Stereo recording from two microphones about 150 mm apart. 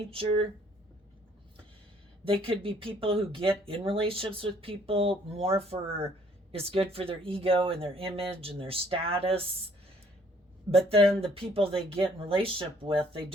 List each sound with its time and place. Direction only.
0.1 s speech: 40° right (ahead or behind)
2.2 s speech: 40° right (ahead or behind)
10.7 s speech: 40° right (ahead or behind)